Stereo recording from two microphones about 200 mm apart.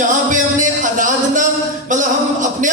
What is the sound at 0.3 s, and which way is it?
Music, 40° right (ahead or behind).